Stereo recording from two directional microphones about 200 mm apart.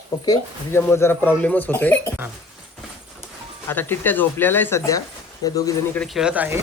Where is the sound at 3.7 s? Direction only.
10° left (ahead or behind).